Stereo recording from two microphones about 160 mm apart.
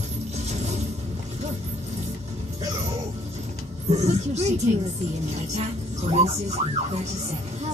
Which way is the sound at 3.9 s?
45° right (ahead or behind).